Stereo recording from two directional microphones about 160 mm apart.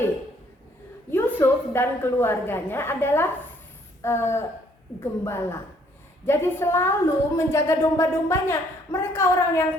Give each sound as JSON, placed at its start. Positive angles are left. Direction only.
{"t": 1.1, "sound": "a woman's voice", "side_deg": 10}